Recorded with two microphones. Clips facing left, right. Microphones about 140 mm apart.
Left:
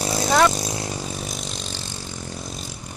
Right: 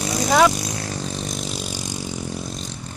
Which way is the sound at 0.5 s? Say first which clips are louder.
Left 1 dB; 25° left (ahead or behind).